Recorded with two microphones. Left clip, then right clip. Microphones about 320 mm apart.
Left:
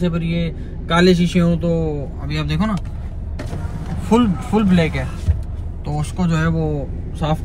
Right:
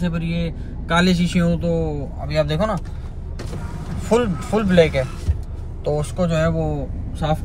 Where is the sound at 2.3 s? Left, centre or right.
Right.